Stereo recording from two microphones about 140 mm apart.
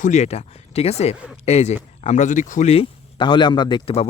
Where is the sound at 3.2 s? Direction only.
35° left (ahead or behind).